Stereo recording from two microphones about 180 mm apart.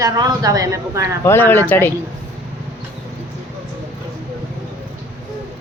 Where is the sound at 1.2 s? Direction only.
15° left (ahead or behind).